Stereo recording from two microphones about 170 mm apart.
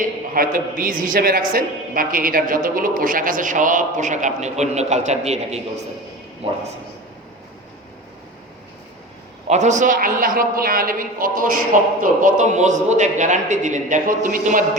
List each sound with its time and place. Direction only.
0.0 s a man's voice: 55° right (ahead or behind); by 5.5 s 40° right (ahead or behind)
9.5 s a man's voice: 45° right (ahead or behind)